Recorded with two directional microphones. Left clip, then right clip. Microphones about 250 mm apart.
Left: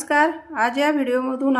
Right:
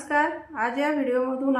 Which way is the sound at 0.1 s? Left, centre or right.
Left.